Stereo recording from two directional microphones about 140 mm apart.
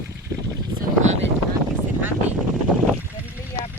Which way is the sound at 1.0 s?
55° right (ahead or behind).